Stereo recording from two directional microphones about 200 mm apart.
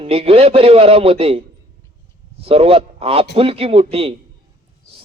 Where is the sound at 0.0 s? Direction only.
30° right (ahead or behind).